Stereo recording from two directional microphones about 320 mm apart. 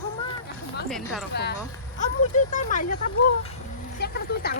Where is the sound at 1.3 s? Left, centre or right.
Left.